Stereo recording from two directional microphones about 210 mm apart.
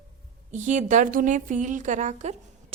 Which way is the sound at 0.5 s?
35° right (ahead or behind).